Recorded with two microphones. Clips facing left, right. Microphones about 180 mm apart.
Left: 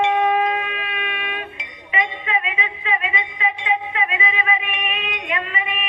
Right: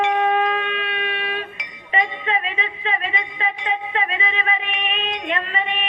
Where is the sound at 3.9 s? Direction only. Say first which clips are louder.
Even; 35° right (ahead or behind).